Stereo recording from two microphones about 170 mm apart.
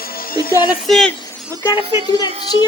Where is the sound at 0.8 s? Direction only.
Centre (ahead or behind).